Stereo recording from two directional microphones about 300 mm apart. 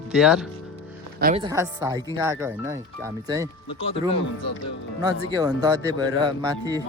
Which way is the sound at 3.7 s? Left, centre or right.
Centre.